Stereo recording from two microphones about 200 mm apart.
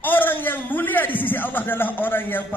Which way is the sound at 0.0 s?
10° left (ahead or behind).